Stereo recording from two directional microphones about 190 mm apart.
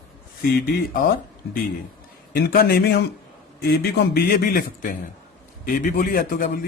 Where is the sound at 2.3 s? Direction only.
55° left (ahead or behind).